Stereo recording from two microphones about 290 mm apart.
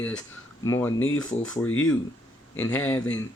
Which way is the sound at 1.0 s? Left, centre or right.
Left.